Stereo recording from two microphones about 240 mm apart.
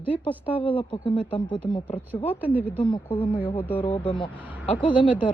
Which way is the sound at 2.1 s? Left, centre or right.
Centre.